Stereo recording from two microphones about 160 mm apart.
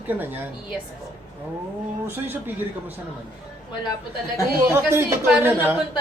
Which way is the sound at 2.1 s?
15° right (ahead or behind).